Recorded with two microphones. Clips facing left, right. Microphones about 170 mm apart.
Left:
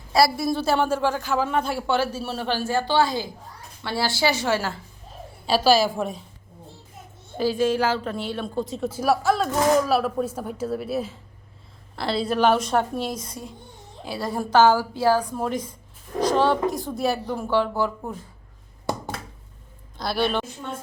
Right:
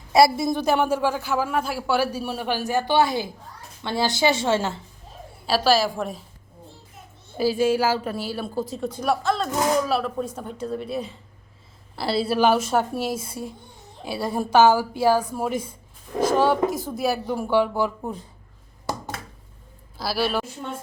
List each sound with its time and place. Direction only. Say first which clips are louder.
0.3 s a man's voice: right 1 dB; 20° right (ahead or behind)
5.5 s speech: left 1 dB; centre (ahead or behind)
7.3 s a man's voice: right 1 dB; 10° right (ahead or behind)
20.0 s speech: even; 5° right (ahead or behind)